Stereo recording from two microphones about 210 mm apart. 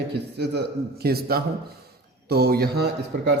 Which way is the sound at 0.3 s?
55° right (ahead or behind).